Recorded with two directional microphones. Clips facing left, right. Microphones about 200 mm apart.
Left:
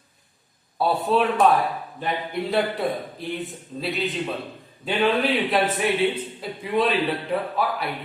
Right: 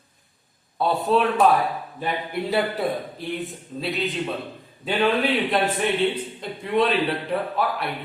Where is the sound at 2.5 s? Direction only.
Centre (ahead or behind).